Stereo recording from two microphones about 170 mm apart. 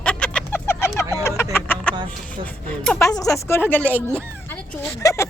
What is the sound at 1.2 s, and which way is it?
Vehicle, 15° left (ahead or behind).